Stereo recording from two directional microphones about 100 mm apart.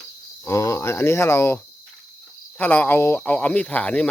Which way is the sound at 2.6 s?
20° left (ahead or behind).